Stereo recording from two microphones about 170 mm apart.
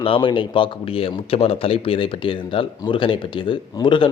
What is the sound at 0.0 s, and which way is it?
A man's voice, 30° left (ahead or behind).